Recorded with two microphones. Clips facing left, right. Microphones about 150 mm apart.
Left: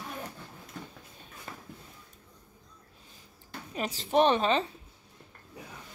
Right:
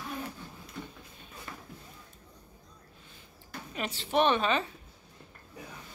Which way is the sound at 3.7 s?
35° left (ahead or behind).